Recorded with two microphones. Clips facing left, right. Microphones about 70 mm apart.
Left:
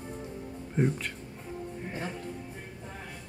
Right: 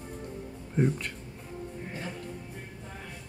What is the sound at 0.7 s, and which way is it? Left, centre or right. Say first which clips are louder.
Speech: right 1 dB; centre.